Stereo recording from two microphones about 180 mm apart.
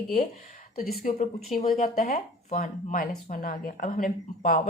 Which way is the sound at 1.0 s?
45° left (ahead or behind).